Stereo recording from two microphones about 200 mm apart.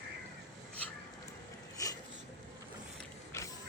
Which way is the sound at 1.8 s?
15° left (ahead or behind).